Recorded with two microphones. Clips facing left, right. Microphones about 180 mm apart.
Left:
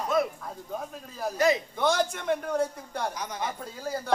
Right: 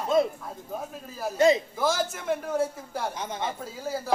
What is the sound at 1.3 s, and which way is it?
Speech, 25° right (ahead or behind).